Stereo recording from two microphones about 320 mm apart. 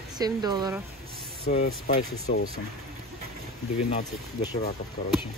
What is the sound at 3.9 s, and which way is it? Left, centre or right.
Speech, centre.